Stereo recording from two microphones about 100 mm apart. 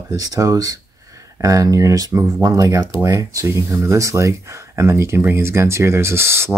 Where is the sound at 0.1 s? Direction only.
35° right (ahead or behind).